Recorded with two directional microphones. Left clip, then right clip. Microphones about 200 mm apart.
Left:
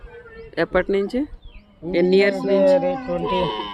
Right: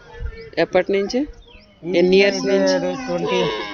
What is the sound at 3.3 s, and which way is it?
Speech, 55° left (ahead or behind).